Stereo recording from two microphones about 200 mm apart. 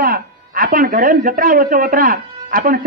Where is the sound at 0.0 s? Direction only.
45° right (ahead or behind).